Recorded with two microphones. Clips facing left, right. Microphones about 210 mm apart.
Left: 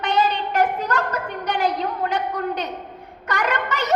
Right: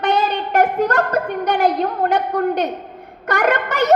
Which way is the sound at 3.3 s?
60° right (ahead or behind).